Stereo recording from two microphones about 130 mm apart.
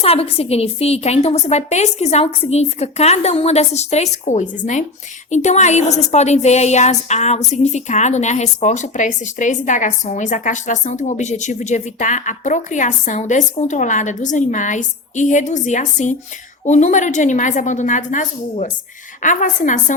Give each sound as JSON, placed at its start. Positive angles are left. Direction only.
{"t": 0.0, "sound": "a woman's voice", "side_deg": 50}